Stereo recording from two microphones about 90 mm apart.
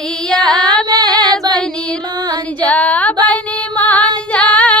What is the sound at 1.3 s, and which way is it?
Female singing, 45° right (ahead or behind).